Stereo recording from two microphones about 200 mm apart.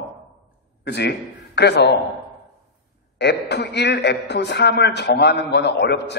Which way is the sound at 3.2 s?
55° left (ahead or behind).